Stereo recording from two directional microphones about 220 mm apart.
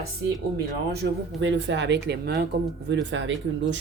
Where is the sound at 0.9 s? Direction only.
50° right (ahead or behind).